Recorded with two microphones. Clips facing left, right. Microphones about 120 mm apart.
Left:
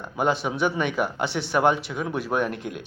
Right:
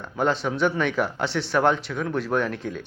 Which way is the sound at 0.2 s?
5° left (ahead or behind).